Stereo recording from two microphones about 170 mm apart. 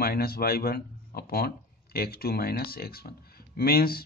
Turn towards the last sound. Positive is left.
turn(degrees=65)  # may be behind; listen again after turning